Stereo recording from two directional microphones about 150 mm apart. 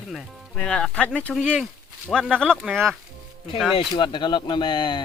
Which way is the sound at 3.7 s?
35° left (ahead or behind).